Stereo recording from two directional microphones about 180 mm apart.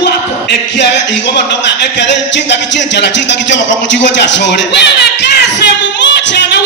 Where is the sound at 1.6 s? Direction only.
75° left (ahead or behind).